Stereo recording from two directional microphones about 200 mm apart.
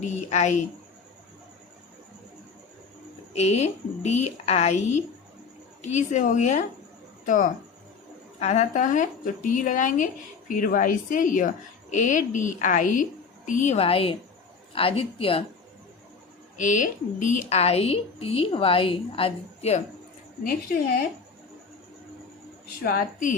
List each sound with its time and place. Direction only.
0.1 s a woman's voice: 35° left (ahead or behind)
3.3 s a woman's voice: 35° left (ahead or behind)
8.4 s a woman's voice: 35° left (ahead or behind)
16.6 s a woman's voice: 40° left (ahead or behind)
22.8 s a woman's voice: 45° left (ahead or behind)